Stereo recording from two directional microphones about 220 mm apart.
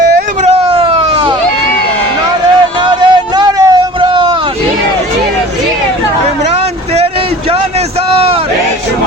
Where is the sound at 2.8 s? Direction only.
20° right (ahead or behind).